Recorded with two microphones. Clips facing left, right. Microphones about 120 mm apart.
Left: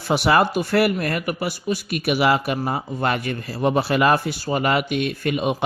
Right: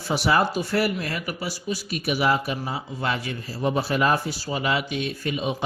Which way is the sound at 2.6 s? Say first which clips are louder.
Left 6 dB; 50° left (ahead or behind).